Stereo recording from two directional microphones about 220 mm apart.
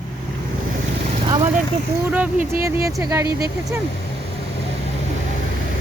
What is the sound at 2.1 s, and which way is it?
Speech, 10° right (ahead or behind).